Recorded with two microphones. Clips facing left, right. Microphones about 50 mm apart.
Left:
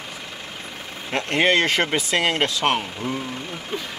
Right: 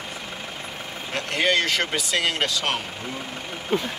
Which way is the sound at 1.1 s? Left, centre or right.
Left.